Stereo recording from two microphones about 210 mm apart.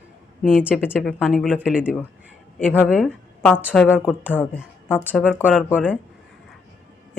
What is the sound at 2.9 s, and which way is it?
A woman's voice, centre (ahead or behind).